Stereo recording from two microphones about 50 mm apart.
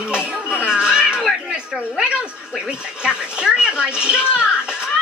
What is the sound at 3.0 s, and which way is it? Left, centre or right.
A child's voice, centre.